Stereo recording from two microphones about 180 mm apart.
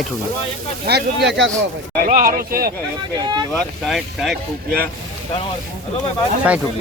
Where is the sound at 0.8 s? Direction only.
70° right (ahead or behind).